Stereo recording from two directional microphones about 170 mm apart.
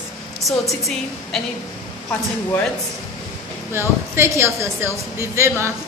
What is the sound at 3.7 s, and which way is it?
A woman's voice, 15° right (ahead or behind).